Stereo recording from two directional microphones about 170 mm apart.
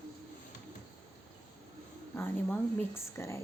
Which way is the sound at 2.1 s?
15° left (ahead or behind).